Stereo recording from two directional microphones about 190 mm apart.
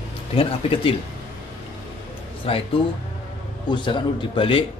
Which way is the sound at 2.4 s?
30° left (ahead or behind).